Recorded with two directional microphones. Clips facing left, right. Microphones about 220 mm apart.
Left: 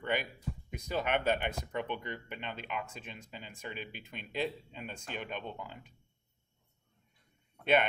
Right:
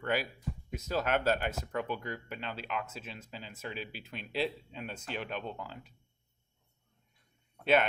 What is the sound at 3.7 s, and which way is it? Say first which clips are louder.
Speech: right 2 dB; 50° left (ahead or behind).